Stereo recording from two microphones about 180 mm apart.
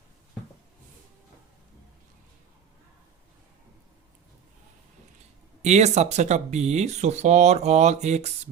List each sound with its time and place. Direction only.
5.6 s speech: 40° right (ahead or behind)